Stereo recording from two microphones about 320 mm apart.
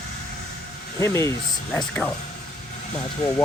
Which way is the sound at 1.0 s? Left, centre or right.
Centre.